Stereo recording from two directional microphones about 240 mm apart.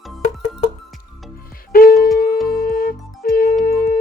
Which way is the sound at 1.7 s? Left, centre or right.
Left.